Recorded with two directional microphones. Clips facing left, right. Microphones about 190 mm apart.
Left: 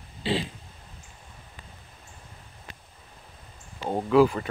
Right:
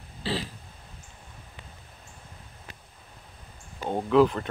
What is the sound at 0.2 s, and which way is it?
Throat clearing, 20° left (ahead or behind).